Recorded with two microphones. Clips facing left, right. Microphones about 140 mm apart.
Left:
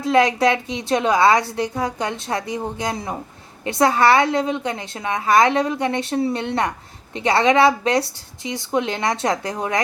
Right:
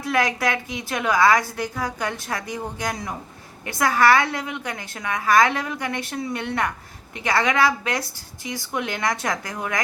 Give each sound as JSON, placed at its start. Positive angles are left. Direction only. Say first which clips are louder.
{"t": 0.0, "sound": "a woman's voice", "louder": "left 6 dB", "side_deg": 25}